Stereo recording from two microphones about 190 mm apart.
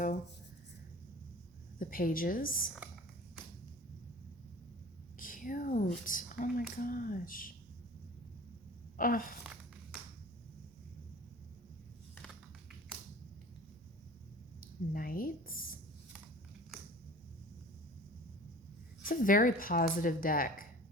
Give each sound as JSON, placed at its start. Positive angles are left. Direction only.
{"t": 1.8, "sound": "speech", "side_deg": 50}
{"t": 5.1, "sound": "a sound", "side_deg": 45}
{"t": 6.1, "sound": "speech", "side_deg": 45}
{"t": 9.0, "sound": "speech", "side_deg": 45}
{"t": 14.6, "sound": "speech", "side_deg": 50}
{"t": 19.0, "sound": "speech", "side_deg": 45}